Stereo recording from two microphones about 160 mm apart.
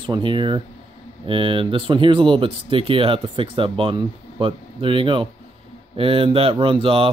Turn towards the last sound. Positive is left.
turn(degrees=-35)  # may be behind; listen again after turning